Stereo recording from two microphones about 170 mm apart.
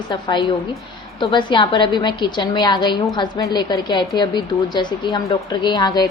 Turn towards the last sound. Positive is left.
turn(degrees=25)  # may be behind; listen again after turning